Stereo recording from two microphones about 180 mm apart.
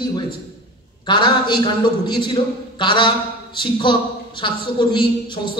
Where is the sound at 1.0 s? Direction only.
25° left (ahead or behind).